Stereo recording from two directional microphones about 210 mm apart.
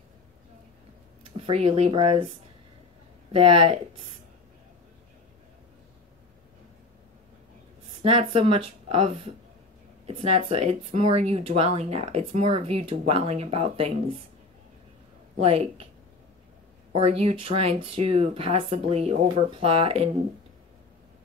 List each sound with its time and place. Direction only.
1.3 s speech: 30° right (ahead or behind)
3.3 s speech: 25° right (ahead or behind)
8.0 s speech: 25° right (ahead or behind)
15.4 s speech: 30° right (ahead or behind)
16.9 s speech: 30° right (ahead or behind)